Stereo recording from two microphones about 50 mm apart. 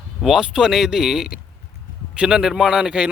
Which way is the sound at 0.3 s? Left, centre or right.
Centre.